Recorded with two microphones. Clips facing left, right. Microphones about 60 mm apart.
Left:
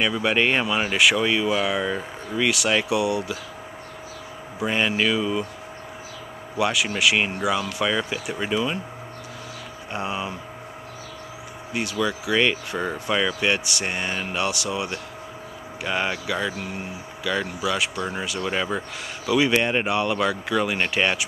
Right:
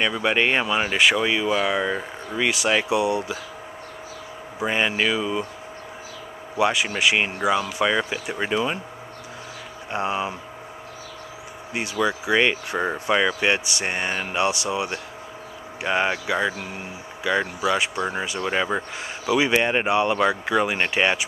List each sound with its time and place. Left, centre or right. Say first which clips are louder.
0.0 s speech: even; centre
4.6 s speech: even; centre
6.5 s speech: right 2 dB; centre
9.9 s speech: right 3 dB; centre
11.7 s speech: right 1 dB; centre
17.3 s speech: right 3 dB; centre